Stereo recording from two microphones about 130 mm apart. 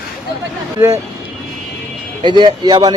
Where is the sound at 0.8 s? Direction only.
20° right (ahead or behind).